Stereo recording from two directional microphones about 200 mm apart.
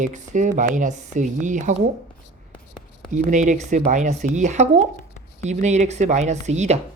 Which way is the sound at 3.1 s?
40° right (ahead or behind).